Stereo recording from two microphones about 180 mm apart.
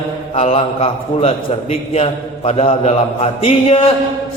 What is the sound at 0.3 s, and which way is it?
Mantra, 35° left (ahead or behind).